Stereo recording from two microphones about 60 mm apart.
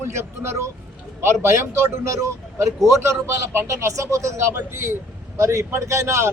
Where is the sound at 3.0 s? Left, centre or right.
Right.